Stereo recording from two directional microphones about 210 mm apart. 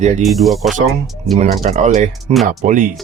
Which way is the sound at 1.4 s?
30° right (ahead or behind).